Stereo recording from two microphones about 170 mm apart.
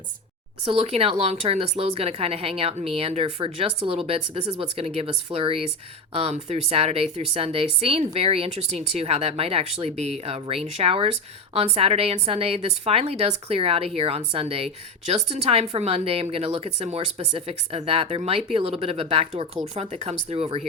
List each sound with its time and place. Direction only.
0.6 s speech: 35° right (ahead or behind)